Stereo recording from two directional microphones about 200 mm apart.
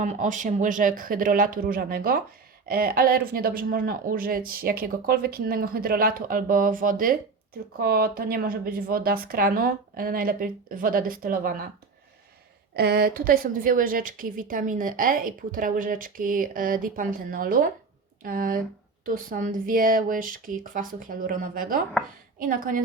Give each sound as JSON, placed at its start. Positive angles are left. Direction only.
{"t": 0.0, "sound": "a woman's voice", "side_deg": -40}
{"t": 12.7, "sound": "a woman's voice", "side_deg": -50}